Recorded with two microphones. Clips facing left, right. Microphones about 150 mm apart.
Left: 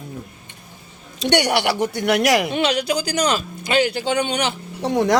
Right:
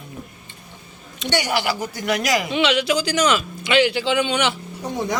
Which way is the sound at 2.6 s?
40° left (ahead or behind).